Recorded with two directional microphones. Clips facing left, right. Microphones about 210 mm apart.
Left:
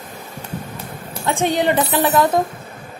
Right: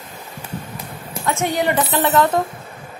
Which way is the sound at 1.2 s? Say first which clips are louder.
Left 2 dB; 30° left (ahead or behind).